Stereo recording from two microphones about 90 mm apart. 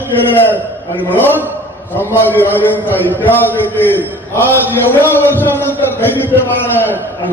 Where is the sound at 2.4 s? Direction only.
20° left (ahead or behind).